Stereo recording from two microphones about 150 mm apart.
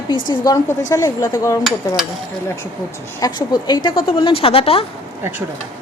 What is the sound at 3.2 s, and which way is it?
A woman's voice, 30° left (ahead or behind).